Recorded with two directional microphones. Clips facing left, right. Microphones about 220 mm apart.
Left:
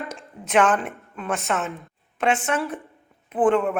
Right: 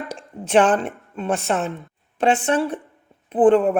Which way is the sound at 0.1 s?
30° right (ahead or behind).